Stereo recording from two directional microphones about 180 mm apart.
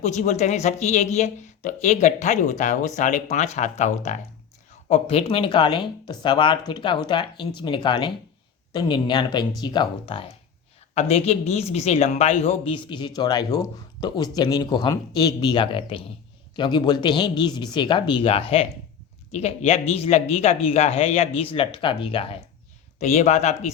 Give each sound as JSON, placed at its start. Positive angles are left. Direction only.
{"t": 0.0, "sound": "speech", "side_deg": 40}
{"t": 23.0, "sound": "speech", "side_deg": 40}